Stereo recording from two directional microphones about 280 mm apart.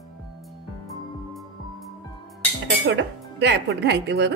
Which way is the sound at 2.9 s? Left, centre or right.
Right.